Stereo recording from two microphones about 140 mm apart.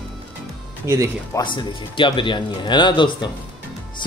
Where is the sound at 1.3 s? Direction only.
35° left (ahead or behind).